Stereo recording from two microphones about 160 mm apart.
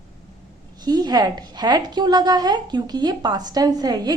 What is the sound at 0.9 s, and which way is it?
A woman's voice, 25° right (ahead or behind).